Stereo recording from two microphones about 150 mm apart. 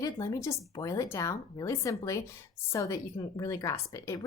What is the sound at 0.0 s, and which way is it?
Speech, 20° left (ahead or behind).